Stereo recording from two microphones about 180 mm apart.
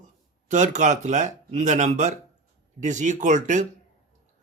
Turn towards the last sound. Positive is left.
turn(degrees=-45)  # may be behind; listen again after turning